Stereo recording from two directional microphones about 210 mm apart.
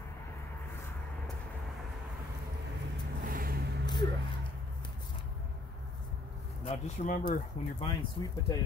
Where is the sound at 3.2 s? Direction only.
45° right (ahead or behind).